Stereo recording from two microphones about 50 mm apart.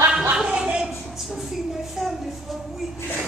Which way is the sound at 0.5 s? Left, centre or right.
Right.